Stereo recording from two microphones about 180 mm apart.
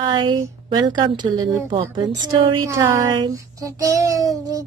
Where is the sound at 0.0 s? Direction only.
25° right (ahead or behind).